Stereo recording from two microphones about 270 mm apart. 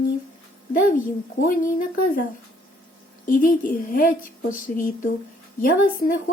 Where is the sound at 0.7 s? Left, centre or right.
Left.